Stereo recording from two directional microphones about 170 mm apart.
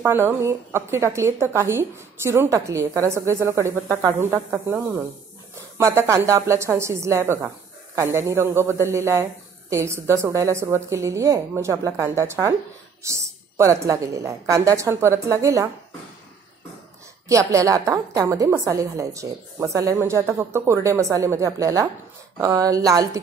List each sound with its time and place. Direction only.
0.0 s a woman's voice: 15° right (ahead or behind)
17.3 s a woman's voice: 20° right (ahead or behind)